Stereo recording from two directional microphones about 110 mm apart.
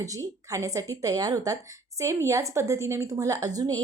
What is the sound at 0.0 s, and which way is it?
A woman's voice, 30° right (ahead or behind).